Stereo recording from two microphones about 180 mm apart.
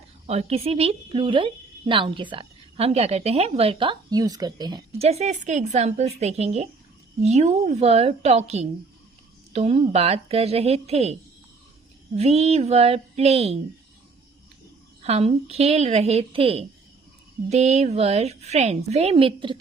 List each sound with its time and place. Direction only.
0.3 s a woman's voice: 35° right (ahead or behind)
4.9 s a woman's voice: 35° right (ahead or behind)
15.0 s a woman's voice: 35° right (ahead or behind)